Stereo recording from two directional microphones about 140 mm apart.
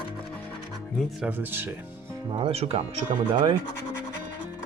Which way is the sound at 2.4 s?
45° right (ahead or behind).